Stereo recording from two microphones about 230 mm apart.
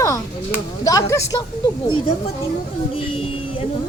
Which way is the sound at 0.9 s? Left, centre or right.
Centre.